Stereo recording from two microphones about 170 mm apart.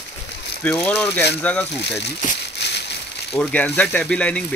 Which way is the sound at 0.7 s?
5° left (ahead or behind).